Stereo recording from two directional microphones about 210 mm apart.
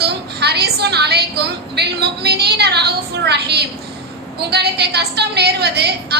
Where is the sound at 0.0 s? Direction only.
50° right (ahead or behind).